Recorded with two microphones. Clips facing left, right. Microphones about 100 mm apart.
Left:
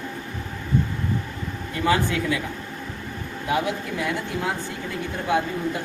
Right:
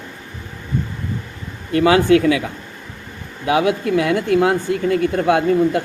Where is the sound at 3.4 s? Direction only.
90° right; by 5.8 s 65° right (ahead or behind).